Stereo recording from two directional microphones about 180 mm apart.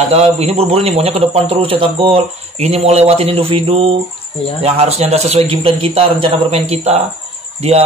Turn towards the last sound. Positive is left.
turn(degrees=-35)  # may be behind; listen again after turning